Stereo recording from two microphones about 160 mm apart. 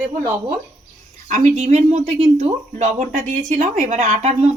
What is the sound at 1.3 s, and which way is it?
Speech, 45° right (ahead or behind).